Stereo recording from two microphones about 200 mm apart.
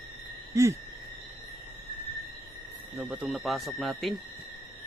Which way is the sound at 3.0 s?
5° right (ahead or behind).